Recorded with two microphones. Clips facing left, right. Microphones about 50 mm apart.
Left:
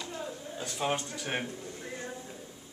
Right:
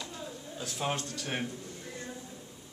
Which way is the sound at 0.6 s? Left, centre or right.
Centre.